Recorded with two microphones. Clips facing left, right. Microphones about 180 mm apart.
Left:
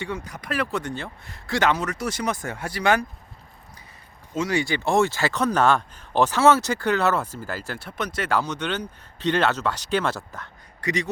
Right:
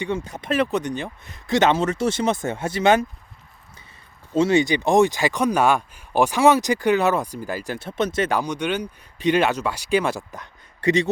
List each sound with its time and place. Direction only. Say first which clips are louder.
0.0 s speech: right 5 dB; 25° right (ahead or behind)
4.4 s speech: right 6 dB; 25° right (ahead or behind)
10.8 s speech: right 7 dB; 25° right (ahead or behind)